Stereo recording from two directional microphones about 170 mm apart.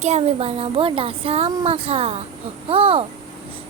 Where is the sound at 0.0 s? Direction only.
40° right (ahead or behind).